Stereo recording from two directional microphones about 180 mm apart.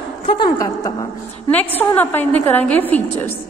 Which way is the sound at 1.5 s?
10° left (ahead or behind).